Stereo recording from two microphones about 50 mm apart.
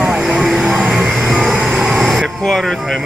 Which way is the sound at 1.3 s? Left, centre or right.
Centre.